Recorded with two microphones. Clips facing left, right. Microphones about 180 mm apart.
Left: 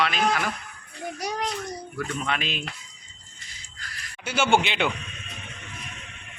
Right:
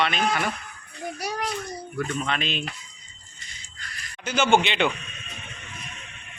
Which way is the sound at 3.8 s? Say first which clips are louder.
Right 1 dB; 5° left (ahead or behind).